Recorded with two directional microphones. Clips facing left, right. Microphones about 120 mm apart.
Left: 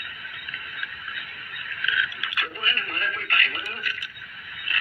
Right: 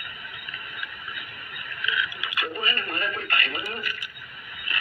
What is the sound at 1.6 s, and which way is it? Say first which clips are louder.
Radio: left 1 dB; 15° right (ahead or behind).